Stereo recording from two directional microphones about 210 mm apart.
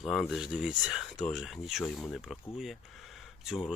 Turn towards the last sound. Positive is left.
turn(degrees=0)  # may be behind; listen again after turning